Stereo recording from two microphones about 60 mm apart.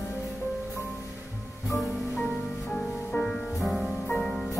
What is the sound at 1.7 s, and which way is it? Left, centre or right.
Music, centre.